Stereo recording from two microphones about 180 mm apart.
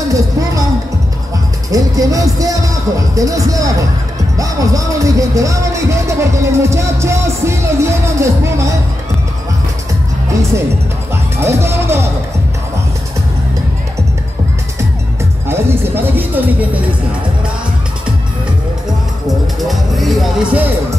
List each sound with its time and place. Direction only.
0.1 s speech: 20° right (ahead or behind)
1.7 s speech: 20° right (ahead or behind)
11.3 s speech: 15° right (ahead or behind)
15.4 s speech: 15° right (ahead or behind)
19.2 s music: centre (ahead or behind)